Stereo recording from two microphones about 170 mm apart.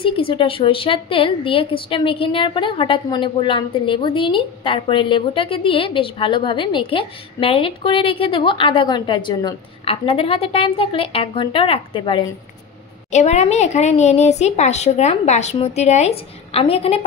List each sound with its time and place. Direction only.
0.0 s speech: 30° left (ahead or behind)
13.1 s speech: 40° left (ahead or behind)